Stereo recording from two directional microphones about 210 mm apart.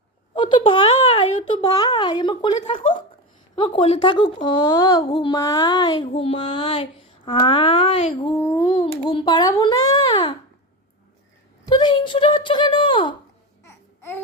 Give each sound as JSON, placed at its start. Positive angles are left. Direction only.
{"t": 0.3, "sound": "a child's voice", "side_deg": 25}
{"t": 8.4, "sound": "a sound", "side_deg": 15}
{"t": 8.6, "sound": "a child's voice", "side_deg": 30}
{"t": 11.7, "sound": "a child's voice", "side_deg": 20}
{"t": 13.7, "sound": "babbling", "side_deg": 10}